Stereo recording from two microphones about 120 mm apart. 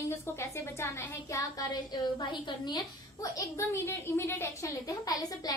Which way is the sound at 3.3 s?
20° left (ahead or behind).